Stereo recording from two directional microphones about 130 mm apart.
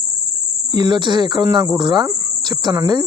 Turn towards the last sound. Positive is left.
turn(degrees=-30)  # may be behind; listen again after turning